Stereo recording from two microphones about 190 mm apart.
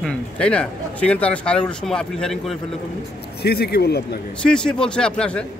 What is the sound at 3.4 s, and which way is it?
Speech, 55° left (ahead or behind).